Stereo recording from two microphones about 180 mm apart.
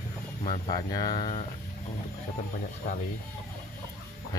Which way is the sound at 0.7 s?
20° left (ahead or behind).